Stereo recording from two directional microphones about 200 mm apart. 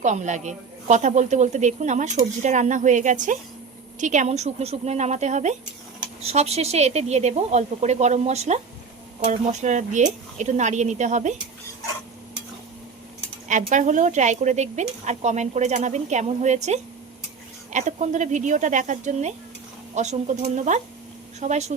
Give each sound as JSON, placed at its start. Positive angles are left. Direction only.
{"t": 0.0, "sound": "a woman's voice", "side_deg": -35}
{"t": 13.5, "sound": "a woman's voice", "side_deg": -40}